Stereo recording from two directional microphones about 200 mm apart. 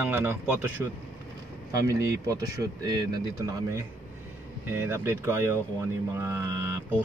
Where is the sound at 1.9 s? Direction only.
15° right (ahead or behind).